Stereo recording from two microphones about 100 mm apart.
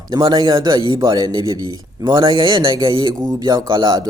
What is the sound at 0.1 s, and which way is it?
A man's voice, 40° right (ahead or behind).